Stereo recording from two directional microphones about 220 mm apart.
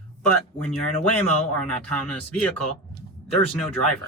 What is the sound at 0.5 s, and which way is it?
Speech, 5° left (ahead or behind).